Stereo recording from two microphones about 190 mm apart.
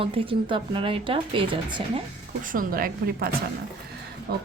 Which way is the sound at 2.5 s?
45° right (ahead or behind).